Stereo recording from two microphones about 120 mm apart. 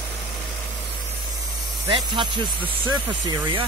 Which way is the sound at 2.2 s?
40° right (ahead or behind).